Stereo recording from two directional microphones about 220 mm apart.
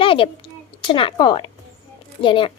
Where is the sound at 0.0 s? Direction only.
25° left (ahead or behind).